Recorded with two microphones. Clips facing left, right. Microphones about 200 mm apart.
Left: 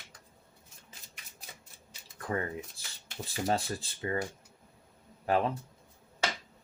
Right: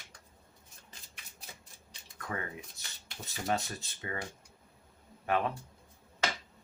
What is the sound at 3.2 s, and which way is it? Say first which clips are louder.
Speech: left 3 dB; 30° left (ahead or behind).